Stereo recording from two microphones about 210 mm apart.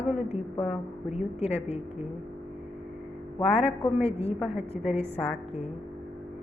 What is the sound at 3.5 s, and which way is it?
A woman's voice, 30° left (ahead or behind).